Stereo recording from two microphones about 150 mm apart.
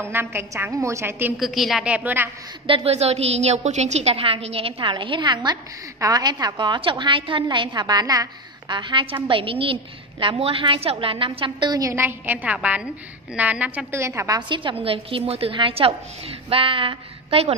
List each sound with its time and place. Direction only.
0.1 s a woman's voice: 15° right (ahead or behind)
1.4 s a woman's voice: centre (ahead or behind)
2.6 s a woman's voice: 40° right (ahead or behind)
11.9 s a woman's voice: 15° right (ahead or behind)
14.0 s a woman's voice: 20° right (ahead or behind)
14.5 s a woman's voice: 35° right (ahead or behind)